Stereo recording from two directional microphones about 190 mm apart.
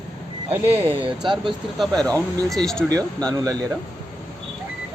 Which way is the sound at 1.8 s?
Centre (ahead or behind).